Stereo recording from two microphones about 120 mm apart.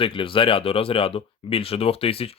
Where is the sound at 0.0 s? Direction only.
45° left (ahead or behind).